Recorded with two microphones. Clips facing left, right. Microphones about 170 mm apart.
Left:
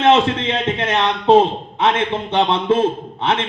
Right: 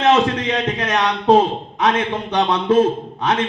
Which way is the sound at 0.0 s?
25° left (ahead or behind).